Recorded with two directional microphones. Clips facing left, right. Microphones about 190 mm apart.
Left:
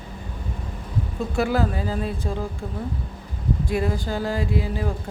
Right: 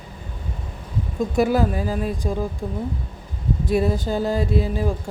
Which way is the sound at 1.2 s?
15° right (ahead or behind).